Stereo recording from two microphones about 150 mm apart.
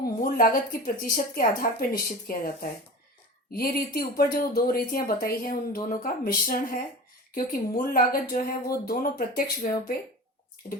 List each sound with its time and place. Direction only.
0.0 s speech: 70° left (ahead or behind)